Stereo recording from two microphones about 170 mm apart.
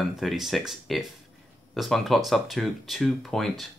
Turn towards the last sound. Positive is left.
turn(degrees=0)  # may be behind; listen again after turning